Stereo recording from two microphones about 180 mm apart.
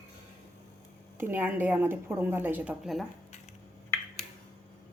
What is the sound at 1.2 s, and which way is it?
A woman's voice, 10° right (ahead or behind).